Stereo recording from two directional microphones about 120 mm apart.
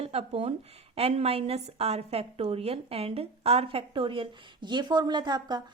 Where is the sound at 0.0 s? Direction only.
60° right (ahead or behind).